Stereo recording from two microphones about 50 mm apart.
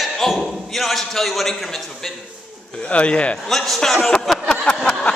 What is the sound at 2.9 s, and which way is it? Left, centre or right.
Speech, left.